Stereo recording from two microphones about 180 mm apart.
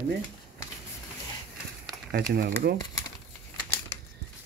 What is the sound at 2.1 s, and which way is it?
Speech, 60° right (ahead or behind).